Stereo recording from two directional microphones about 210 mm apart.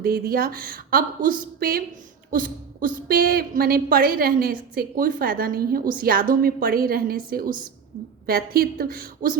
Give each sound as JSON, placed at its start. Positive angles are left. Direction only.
{"t": 0.0, "sound": "a woman's voice", "side_deg": -45}